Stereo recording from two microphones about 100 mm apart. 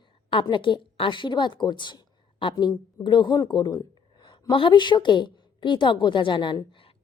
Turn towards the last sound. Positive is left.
turn(degrees=55)  # may be behind; listen again after turning